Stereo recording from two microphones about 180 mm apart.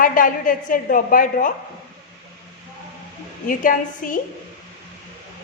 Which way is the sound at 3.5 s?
50° left (ahead or behind).